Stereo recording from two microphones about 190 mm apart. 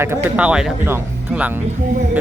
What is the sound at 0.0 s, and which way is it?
Speech, 10° right (ahead or behind).